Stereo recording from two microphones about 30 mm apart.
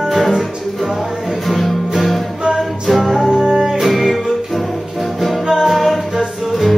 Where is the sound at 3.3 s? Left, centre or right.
Centre.